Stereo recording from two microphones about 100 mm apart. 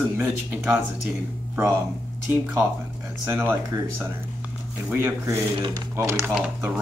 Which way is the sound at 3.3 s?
25° right (ahead or behind).